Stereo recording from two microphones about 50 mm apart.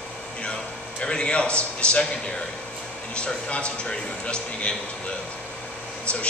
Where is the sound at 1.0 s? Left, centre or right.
Left.